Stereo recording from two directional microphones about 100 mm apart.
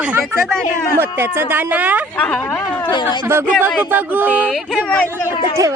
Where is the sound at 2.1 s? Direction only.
15° left (ahead or behind).